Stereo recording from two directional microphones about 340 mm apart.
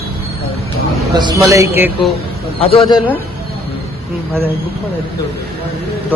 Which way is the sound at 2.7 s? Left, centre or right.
Centre.